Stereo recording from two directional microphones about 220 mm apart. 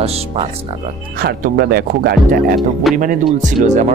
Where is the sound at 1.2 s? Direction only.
45° right (ahead or behind).